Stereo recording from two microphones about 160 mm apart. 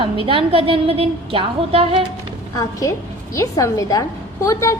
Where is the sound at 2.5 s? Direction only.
20° left (ahead or behind).